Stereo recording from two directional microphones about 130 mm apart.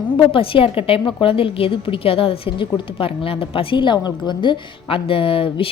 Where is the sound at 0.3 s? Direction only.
45° left (ahead or behind).